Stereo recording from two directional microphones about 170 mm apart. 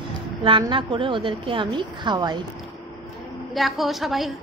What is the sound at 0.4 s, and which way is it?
A woman's voice, 30° right (ahead or behind).